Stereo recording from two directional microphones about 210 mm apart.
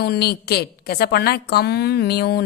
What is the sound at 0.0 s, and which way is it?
A woman's voice, 50° left (ahead or behind).